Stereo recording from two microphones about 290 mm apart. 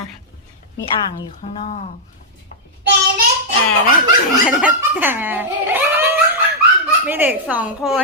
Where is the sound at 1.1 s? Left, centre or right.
Centre.